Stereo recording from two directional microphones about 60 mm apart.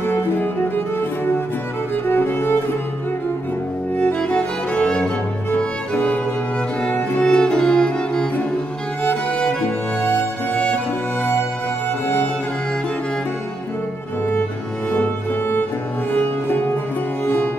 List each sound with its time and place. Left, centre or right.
0.0 s music: left
3.9 s music: left
6.9 s music: left
7.2 s music: centre
16.1 s music: left